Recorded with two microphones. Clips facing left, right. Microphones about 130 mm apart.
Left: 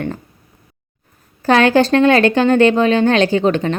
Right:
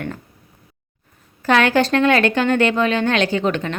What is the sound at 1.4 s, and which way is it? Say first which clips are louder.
A woman's voice: left 4 dB; 35° left (ahead or behind).